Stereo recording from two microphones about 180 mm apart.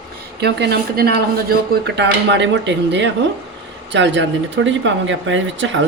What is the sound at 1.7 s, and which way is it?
Speech, 75° right (ahead or behind).